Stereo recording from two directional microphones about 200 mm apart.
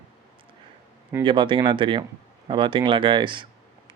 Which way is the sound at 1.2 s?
25° right (ahead or behind).